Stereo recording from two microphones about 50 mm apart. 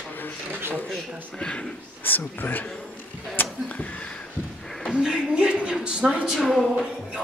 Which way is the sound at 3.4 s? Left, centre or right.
Left.